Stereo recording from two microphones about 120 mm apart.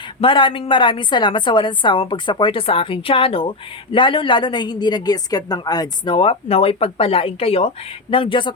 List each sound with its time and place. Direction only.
0.2 s a woman's voice: 45° left (ahead or behind)